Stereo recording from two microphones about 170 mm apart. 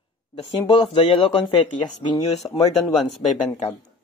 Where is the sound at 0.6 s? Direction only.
30° left (ahead or behind).